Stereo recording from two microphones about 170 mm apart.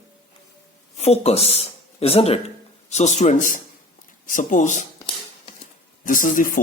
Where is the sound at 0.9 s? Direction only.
40° left (ahead or behind).